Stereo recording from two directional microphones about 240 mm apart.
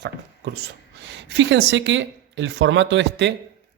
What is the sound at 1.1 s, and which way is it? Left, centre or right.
Speech, right.